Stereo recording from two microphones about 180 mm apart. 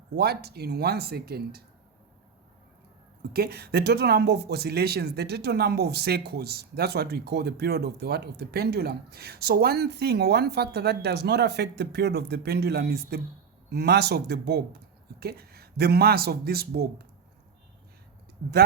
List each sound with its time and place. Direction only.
0.2 s speech: 60° right (ahead or behind)
3.3 s speech: 60° right (ahead or behind)